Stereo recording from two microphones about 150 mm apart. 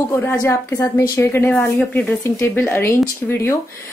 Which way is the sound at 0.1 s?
15° left (ahead or behind).